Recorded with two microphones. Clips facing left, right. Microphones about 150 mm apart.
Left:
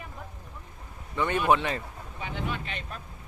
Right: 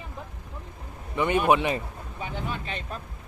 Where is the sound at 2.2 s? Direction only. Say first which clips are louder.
Right 1 dB; 35° right (ahead or behind).